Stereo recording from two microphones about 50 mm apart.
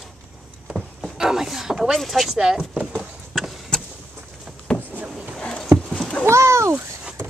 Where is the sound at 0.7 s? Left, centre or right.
Centre.